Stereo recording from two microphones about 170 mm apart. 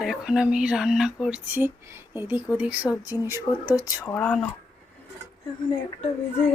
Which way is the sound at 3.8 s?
15° left (ahead or behind).